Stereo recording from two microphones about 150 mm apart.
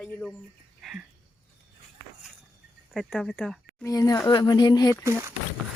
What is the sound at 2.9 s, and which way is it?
Speech, centre (ahead or behind).